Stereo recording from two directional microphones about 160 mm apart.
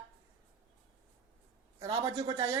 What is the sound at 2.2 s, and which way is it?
Speech, 25° right (ahead or behind).